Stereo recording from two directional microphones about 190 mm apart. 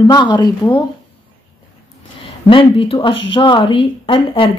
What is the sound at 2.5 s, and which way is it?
Speech, 30° left (ahead or behind).